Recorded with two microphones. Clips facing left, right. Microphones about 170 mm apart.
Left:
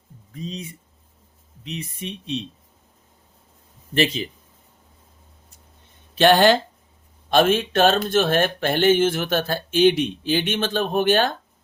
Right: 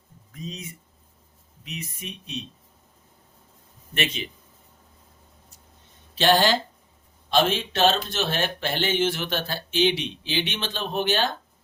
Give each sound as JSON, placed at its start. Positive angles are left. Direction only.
{"t": 0.3, "sound": "speech", "side_deg": 30}
{"t": 3.9, "sound": "speech", "side_deg": 35}
{"t": 6.1, "sound": "speech", "side_deg": 55}